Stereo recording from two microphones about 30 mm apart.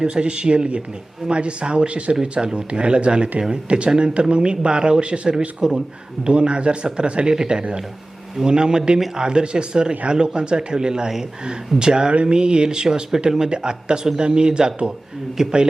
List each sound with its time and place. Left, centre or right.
0.0 s speech: right
1.9 s speech: right
2.2 s speech: right
5.6 s speech: centre
6.2 s speech: right
8.4 s speech: right